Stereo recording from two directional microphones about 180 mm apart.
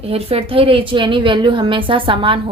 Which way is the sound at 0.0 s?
35° right (ahead or behind).